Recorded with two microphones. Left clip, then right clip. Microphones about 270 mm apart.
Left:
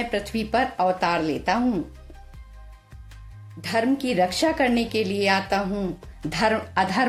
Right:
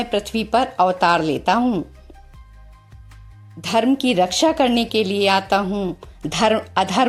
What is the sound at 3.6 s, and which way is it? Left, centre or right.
Speech, right.